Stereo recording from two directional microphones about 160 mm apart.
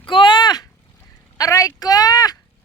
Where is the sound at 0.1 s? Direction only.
30° left (ahead or behind).